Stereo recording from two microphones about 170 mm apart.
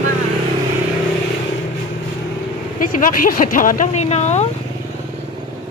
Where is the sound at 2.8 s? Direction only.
55° left (ahead or behind).